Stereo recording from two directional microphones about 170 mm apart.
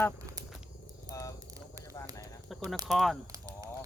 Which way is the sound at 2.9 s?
Centre (ahead or behind).